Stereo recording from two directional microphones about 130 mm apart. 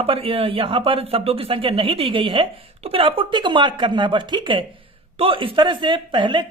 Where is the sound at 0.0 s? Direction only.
45° right (ahead or behind).